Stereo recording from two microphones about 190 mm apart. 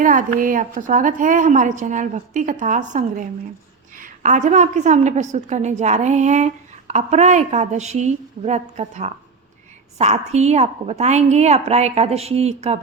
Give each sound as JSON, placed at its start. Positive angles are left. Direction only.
{"t": 0.0, "sound": "a woman's voice", "side_deg": -45}